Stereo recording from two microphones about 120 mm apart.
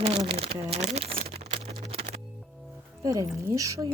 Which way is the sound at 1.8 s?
60° right (ahead or behind).